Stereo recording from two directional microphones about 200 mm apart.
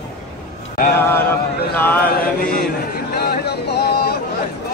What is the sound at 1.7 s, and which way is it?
Chant, 10° left (ahead or behind).